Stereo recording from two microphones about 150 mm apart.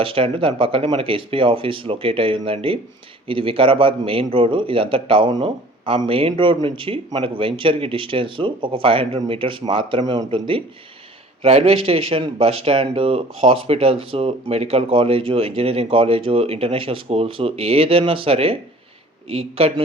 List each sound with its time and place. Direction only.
0.0 s speech: 35° right (ahead or behind)